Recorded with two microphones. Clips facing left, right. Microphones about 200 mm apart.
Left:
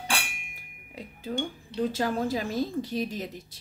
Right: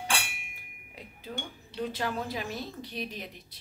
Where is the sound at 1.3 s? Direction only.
35° left (ahead or behind).